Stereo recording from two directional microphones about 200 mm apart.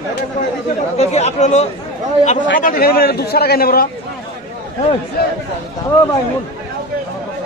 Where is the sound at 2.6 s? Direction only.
45° left (ahead or behind).